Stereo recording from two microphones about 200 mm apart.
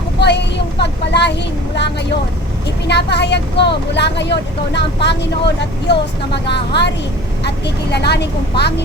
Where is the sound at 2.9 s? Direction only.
55° left (ahead or behind).